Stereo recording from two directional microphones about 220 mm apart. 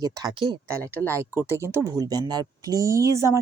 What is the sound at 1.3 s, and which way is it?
Speech, 10° right (ahead or behind).